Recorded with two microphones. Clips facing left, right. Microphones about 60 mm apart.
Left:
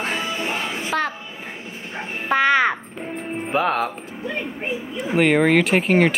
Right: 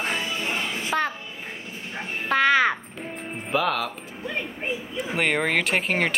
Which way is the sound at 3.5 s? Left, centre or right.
Left.